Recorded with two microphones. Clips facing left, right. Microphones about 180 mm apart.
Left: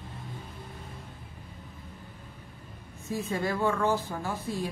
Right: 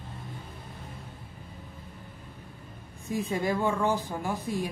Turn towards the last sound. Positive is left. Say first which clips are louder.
# right 2 dB
turn(degrees=-15)  # may be behind; listen again after turning